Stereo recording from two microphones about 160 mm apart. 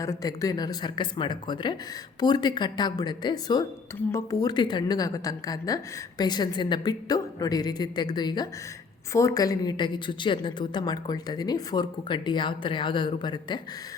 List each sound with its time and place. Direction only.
0.0 s a woman's voice: 20° left (ahead or behind)